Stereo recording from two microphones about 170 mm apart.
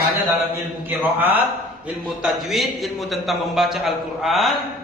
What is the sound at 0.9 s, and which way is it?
A man's voice, 10° right (ahead or behind).